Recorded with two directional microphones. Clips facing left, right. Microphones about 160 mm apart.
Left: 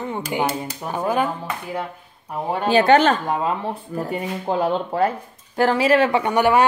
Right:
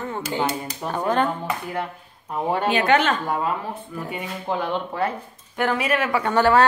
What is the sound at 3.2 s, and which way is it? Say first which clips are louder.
Speech: left 2 dB; 25° left (ahead or behind).